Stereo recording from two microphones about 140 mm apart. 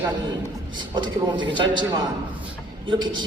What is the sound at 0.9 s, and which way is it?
Speech, 35° right (ahead or behind).